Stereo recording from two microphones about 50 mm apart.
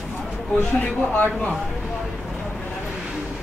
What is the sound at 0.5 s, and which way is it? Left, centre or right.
Speech, left.